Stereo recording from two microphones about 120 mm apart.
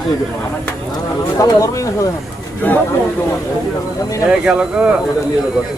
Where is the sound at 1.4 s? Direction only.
30° left (ahead or behind).